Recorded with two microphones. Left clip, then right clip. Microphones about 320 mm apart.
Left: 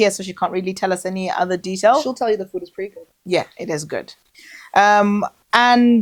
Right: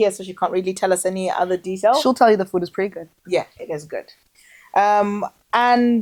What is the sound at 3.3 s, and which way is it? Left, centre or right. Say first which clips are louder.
Speech: left 2 dB; left.